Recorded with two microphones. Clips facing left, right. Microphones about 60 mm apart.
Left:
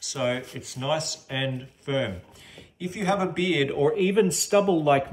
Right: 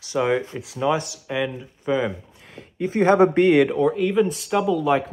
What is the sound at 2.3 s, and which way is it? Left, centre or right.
Speech, right.